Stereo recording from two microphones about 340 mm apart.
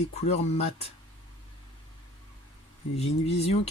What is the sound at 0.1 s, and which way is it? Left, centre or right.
Speech, centre.